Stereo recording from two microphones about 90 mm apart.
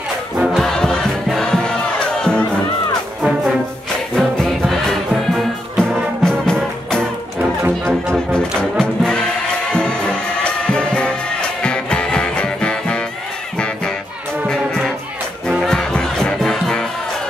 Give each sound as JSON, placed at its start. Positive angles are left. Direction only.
{"t": 0.5, "sound": "music", "side_deg": 5}
{"t": 3.2, "sound": "brass instrument", "side_deg": -10}
{"t": 4.1, "sound": "music", "side_deg": 5}
{"t": 7.6, "sound": "music", "side_deg": -30}
{"t": 8.3, "sound": "music", "side_deg": 10}
{"t": 14.5, "sound": "music", "side_deg": 5}